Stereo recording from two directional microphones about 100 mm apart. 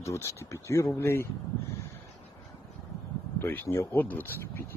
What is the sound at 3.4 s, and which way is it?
Speech, 25° left (ahead or behind).